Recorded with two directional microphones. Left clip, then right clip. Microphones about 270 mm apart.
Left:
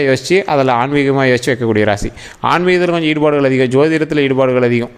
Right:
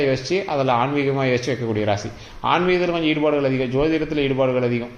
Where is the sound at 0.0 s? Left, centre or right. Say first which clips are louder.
Left 8 dB; left.